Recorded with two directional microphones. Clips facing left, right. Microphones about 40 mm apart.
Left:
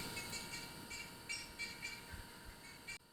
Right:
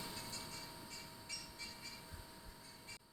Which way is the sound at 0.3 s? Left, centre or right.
Left.